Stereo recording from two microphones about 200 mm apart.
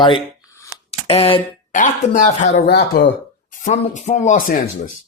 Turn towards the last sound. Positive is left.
turn(degrees=40)  # may be behind; listen again after turning